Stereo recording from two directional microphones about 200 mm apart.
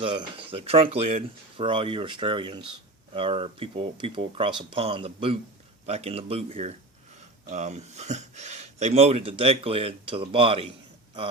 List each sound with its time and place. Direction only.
0.0 s speech: 25° right (ahead or behind)